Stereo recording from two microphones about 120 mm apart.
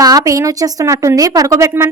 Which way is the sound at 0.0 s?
30° right (ahead or behind).